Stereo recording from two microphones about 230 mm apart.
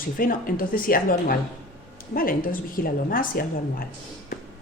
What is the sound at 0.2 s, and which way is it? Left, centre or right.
Speech, left.